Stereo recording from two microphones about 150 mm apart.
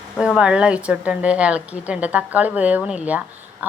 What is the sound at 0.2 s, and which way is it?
Speech, 5° right (ahead or behind).